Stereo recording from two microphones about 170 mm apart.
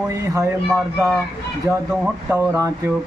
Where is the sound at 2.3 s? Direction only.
20° right (ahead or behind).